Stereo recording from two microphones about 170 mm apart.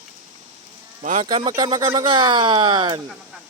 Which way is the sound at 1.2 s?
25° right (ahead or behind).